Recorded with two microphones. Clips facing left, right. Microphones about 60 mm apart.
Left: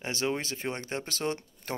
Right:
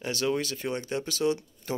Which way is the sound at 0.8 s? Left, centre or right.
Left.